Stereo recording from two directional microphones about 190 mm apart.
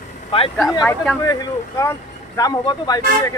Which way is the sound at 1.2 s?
20° left (ahead or behind).